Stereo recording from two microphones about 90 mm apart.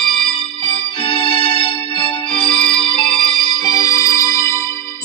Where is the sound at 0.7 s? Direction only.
85° left; by 4.6 s 40° left (ahead or behind).